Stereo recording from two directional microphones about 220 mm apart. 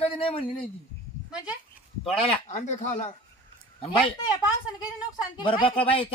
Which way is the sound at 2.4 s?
30° left (ahead or behind).